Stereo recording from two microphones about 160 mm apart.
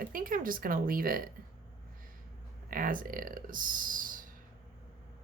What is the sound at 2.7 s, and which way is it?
Speech, 60° right (ahead or behind).